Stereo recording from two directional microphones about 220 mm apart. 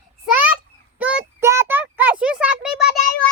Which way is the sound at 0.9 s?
5° right (ahead or behind).